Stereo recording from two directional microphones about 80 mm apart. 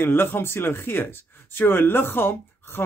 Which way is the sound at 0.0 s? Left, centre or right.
Left.